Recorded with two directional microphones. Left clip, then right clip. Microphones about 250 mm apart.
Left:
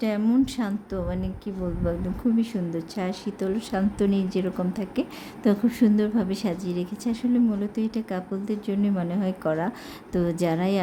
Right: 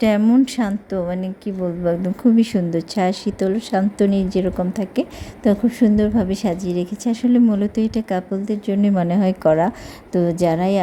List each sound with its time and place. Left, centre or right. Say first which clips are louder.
0.0 s a woman's voice: right 8 dB; right